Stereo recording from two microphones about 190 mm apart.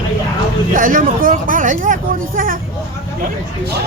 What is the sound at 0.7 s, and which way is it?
Speech, 45° right (ahead or behind).